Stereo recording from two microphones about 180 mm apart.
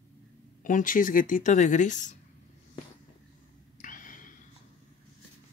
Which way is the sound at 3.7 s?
50° left (ahead or behind).